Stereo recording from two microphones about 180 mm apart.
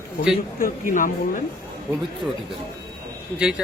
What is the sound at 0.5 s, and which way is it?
Speech, 50° left (ahead or behind).